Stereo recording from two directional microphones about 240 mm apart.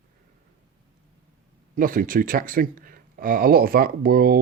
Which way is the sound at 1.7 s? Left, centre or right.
Right.